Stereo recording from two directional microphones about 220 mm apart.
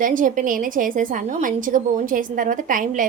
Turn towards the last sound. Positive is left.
turn(degrees=-35)  # may be behind; listen again after turning